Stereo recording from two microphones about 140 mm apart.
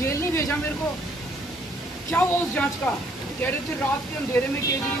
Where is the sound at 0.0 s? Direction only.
20° left (ahead or behind).